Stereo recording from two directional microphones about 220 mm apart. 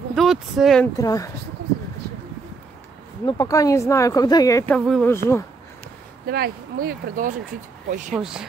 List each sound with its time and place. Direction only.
0.1 s speech: centre (ahead or behind)
0.9 s speech: 15° left (ahead or behind)
3.3 s speech: 15° left (ahead or behind)
4.7 s speech: 5° left (ahead or behind)
6.2 s speech: 45° right (ahead or behind)
8.1 s speech: centre (ahead or behind)